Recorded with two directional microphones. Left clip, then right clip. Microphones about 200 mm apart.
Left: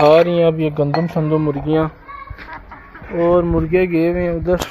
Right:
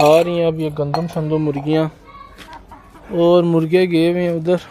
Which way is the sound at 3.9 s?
15° right (ahead or behind).